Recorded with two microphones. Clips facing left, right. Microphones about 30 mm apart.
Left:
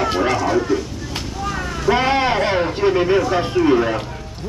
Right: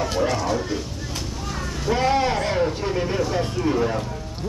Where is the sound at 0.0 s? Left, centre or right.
Left.